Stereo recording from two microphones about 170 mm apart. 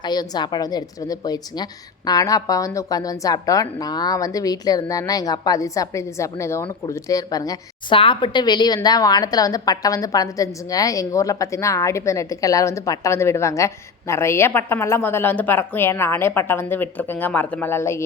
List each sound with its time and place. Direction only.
0.0 s a woman's voice: 25° left (ahead or behind)